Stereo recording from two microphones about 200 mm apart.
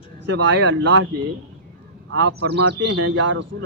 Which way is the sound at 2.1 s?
60° right (ahead or behind).